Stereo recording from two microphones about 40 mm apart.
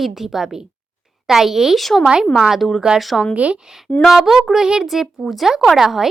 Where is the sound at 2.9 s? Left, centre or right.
Centre.